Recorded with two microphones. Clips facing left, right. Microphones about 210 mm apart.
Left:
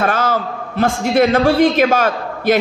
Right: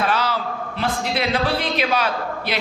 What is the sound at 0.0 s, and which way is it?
A man's voice, 50° left (ahead or behind).